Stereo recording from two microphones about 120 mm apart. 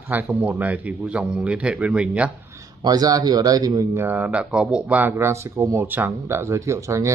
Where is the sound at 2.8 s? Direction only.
30° right (ahead or behind).